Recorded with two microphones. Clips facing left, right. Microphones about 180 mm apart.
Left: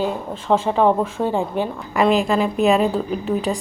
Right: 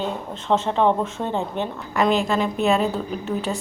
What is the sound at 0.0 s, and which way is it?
Speech, 10° left (ahead or behind).